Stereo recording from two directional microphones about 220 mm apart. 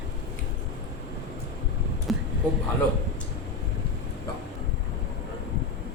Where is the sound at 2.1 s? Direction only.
Centre (ahead or behind).